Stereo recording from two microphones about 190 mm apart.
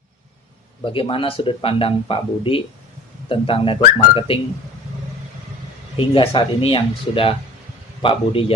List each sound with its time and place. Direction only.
0.8 s speech: 25° left (ahead or behind)
6.0 s speech: 25° left (ahead or behind)